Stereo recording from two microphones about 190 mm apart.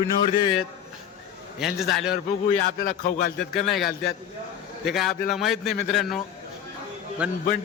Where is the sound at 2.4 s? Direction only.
40° left (ahead or behind).